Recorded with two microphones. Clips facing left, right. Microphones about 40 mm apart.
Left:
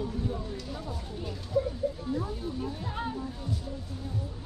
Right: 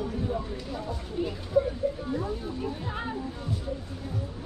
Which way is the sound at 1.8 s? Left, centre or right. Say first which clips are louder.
Right 3 dB; centre.